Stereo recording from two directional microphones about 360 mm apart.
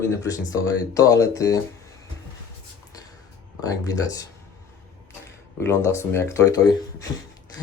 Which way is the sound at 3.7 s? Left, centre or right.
Centre.